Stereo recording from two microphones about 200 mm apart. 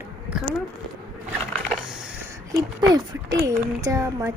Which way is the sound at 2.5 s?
20° right (ahead or behind).